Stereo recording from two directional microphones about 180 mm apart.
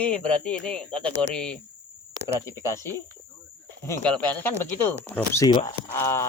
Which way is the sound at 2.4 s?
15° left (ahead or behind).